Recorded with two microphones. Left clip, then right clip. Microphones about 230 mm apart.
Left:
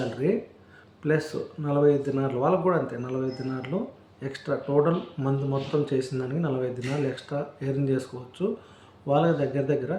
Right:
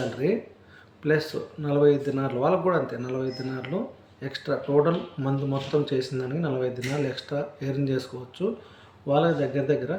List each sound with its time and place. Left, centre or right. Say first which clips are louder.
0.2 s speech: even; centre